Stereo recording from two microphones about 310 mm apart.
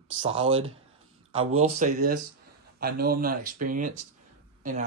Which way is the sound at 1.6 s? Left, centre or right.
Right.